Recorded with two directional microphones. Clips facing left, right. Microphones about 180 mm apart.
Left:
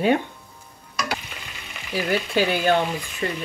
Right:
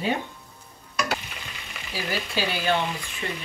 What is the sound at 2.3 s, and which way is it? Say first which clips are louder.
Speech: left 5 dB; 50° left (ahead or behind).